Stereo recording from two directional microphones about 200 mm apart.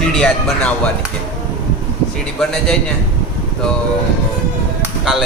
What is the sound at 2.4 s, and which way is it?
Speech, 5° left (ahead or behind).